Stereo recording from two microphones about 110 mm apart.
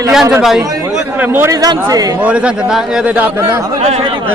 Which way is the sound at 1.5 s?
35° right (ahead or behind).